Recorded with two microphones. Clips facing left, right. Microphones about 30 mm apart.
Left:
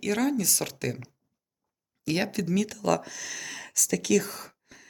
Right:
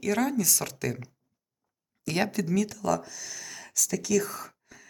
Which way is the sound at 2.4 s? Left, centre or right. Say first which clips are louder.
Even; left.